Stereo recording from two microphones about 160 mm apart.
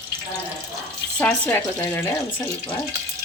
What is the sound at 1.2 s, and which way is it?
Frying, 10° left (ahead or behind).